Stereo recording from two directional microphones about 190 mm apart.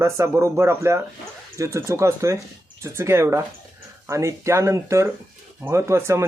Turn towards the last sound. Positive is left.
turn(degrees=-15)  # may be behind; listen again after turning